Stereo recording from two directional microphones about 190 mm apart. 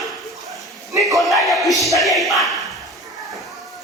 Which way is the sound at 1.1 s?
Centre (ahead or behind).